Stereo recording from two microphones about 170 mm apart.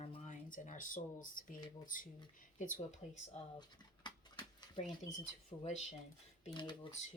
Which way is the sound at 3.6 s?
25° left (ahead or behind).